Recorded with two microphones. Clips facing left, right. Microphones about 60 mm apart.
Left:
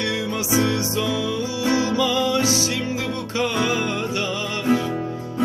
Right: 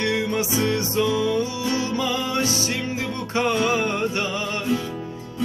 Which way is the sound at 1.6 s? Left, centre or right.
Left.